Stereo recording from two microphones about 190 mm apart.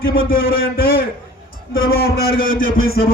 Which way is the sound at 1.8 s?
55° left (ahead or behind).